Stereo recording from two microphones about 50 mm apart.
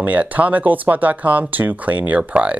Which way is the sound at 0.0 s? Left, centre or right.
Right.